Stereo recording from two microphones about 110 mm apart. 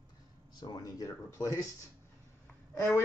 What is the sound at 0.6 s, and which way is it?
Speech, 35° left (ahead or behind).